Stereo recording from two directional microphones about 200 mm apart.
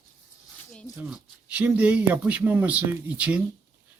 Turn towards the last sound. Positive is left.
turn(degrees=-5)  # may be behind; listen again after turning